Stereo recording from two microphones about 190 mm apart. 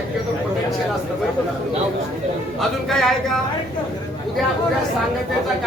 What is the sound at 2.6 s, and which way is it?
Speech, centre (ahead or behind).